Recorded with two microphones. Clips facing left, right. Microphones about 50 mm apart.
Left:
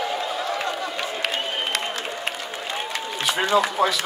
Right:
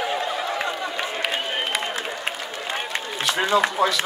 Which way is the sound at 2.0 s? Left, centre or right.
Centre.